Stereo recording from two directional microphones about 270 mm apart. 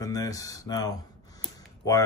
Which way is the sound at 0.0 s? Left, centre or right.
Centre.